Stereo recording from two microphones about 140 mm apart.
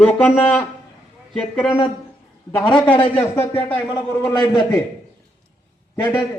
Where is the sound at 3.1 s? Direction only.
10° left (ahead or behind).